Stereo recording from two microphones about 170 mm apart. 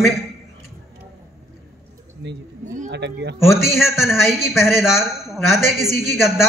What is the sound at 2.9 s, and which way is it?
Speech, 90° right.